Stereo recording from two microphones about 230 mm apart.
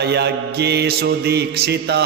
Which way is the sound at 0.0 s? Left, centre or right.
Right.